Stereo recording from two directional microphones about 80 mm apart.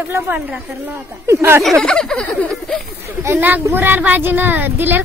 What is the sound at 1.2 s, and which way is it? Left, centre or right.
Speech, right.